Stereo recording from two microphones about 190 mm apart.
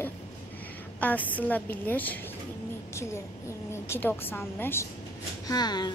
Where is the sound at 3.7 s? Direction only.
10° left (ahead or behind).